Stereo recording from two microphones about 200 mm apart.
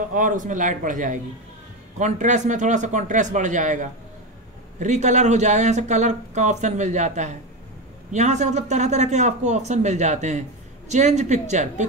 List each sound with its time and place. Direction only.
0.1 s speech: 40° right (ahead or behind)